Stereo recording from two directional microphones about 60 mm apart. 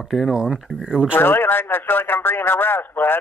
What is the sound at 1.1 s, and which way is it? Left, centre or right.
Speech, left.